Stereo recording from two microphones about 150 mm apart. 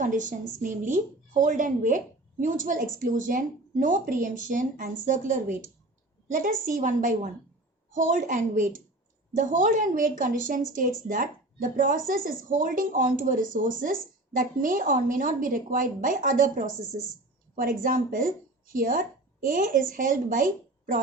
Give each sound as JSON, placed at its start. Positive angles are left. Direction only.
{"t": 0.0, "sound": "a woman's voice", "side_deg": -60}